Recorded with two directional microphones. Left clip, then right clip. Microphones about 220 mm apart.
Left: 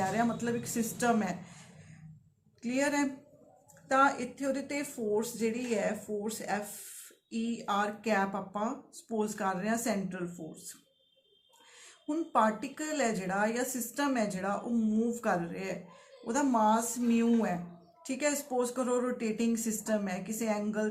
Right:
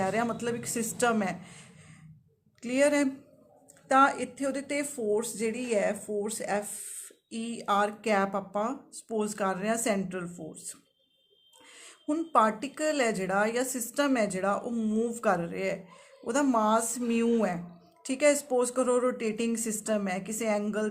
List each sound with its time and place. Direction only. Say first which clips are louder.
0.0 s speech: right 2 dB; 50° right (ahead or behind)
11.8 s speech: right 3 dB; 50° right (ahead or behind)